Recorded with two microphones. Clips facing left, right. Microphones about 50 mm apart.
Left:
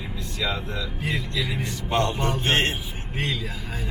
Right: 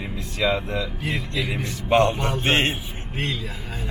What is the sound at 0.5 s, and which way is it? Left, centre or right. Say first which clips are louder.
Speech: right 5 dB; right.